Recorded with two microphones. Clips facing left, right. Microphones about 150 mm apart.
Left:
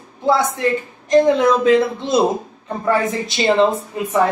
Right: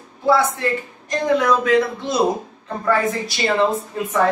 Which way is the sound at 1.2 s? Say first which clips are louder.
Left 4 dB; 25° left (ahead or behind).